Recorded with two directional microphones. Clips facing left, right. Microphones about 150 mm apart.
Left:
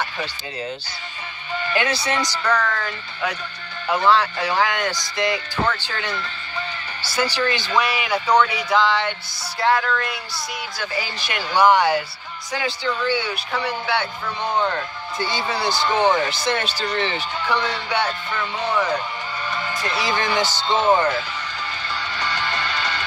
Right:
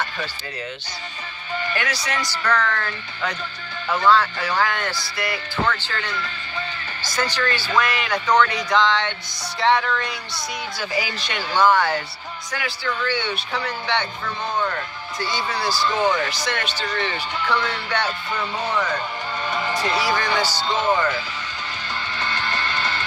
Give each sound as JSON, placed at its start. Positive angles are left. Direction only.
{"t": 1.7, "sound": "speech", "side_deg": 25}
{"t": 2.3, "sound": "speech", "side_deg": 10}
{"t": 12.9, "sound": "speech", "side_deg": 10}
{"t": 15.2, "sound": "speech", "side_deg": 25}
{"t": 17.4, "sound": "speech", "side_deg": 10}
{"t": 20.1, "sound": "speech", "side_deg": 20}